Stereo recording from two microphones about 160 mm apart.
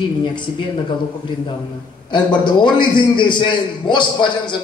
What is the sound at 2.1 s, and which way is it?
A man's voice, 30° left (ahead or behind).